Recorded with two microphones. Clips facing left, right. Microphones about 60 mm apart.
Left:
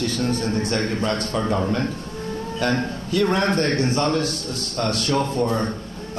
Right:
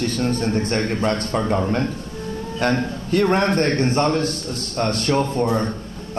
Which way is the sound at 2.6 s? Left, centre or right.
Right.